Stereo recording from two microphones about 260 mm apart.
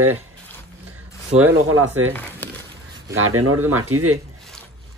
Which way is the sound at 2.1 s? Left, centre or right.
Centre.